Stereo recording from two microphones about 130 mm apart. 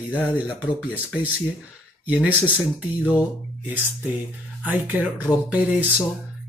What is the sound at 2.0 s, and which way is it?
Speech, 10° right (ahead or behind).